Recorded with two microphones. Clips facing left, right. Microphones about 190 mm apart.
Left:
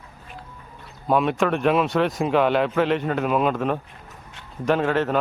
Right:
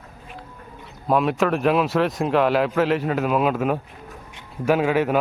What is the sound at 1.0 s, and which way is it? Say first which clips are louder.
A man's voice: right 1 dB; centre (ahead or behind).